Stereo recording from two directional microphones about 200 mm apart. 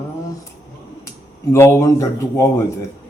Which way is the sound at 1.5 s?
15° left (ahead or behind).